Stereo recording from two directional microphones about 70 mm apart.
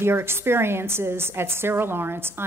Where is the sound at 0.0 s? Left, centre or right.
Right.